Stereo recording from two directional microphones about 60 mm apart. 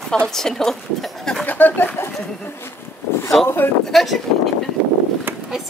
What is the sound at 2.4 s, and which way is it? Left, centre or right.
Speech, left.